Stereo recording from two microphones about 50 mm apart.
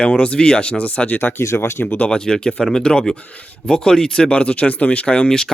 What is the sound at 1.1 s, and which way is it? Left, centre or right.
Speech, left.